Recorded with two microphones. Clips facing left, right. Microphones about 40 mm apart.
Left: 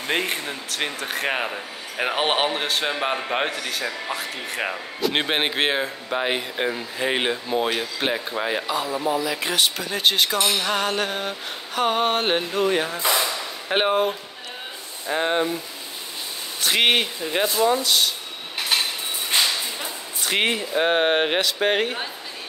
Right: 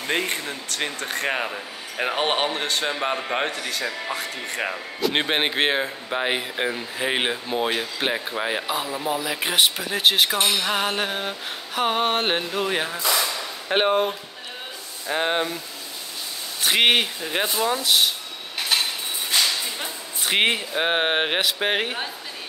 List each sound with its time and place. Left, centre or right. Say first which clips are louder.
0.0 s speech: left 1 dB; centre
9.0 s music: left 2 dB; centre
13.0 s speech: left 1 dB; centre
13.7 s speech: even; centre
15.1 s music: left 1 dB; centre
16.6 s music: right 1 dB; centre
18.7 s cutlery: even; centre
19.3 s whip: left 1 dB; left
19.8 s a sound: even; centre
20.7 s music: left 2 dB; centre